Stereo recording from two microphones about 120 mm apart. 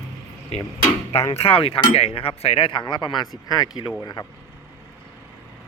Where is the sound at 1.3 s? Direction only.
55° left (ahead or behind); by 4.2 s 35° left (ahead or behind).